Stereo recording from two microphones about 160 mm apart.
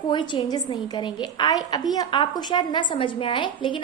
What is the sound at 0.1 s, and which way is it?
A woman's voice, 30° left (ahead or behind).